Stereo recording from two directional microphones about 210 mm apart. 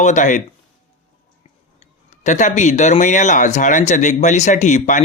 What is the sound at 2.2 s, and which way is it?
Speech, 35° left (ahead or behind).